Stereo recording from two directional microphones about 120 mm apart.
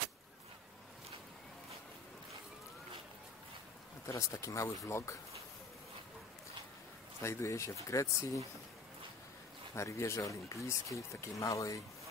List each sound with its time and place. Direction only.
4.0 s speech: 25° left (ahead or behind)
7.2 s speech: 25° left (ahead or behind)
9.8 s speech: 25° left (ahead or behind)